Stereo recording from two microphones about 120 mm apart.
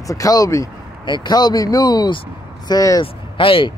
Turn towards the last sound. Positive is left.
turn(degrees=45)  # may be behind; listen again after turning